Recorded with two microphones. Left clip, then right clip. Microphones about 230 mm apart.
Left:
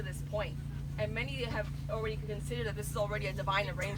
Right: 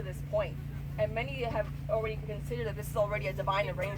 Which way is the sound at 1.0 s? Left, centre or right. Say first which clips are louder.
Right 4 dB; left.